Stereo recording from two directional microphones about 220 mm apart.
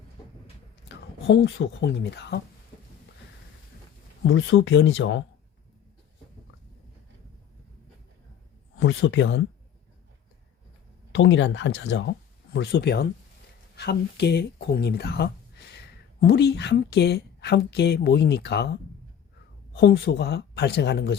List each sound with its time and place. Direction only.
1.3 s a woman's voice: 55° left (ahead or behind)
4.2 s speech: 60° left (ahead or behind)
8.8 s speech: 55° left (ahead or behind)
11.1 s a woman's voice: 55° left (ahead or behind)